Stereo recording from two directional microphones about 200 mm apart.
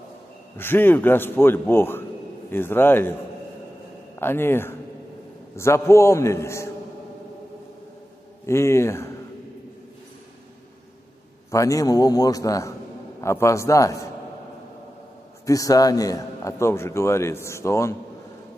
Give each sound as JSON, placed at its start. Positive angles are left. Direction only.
{"t": 0.6, "sound": "a man's voice", "side_deg": 10}
{"t": 4.2, "sound": "a man's voice", "side_deg": 10}
{"t": 8.5, "sound": "a man's voice", "side_deg": 15}
{"t": 11.5, "sound": "a man's voice", "side_deg": 15}
{"t": 15.4, "sound": "a man's voice", "side_deg": 15}